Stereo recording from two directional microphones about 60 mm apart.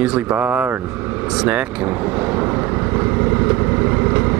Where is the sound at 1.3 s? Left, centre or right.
Centre.